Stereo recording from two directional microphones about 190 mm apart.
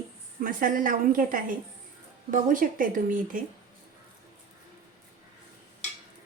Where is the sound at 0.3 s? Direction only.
45° right (ahead or behind).